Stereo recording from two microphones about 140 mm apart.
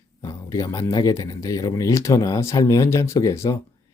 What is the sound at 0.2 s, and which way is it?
Speech, 20° left (ahead or behind).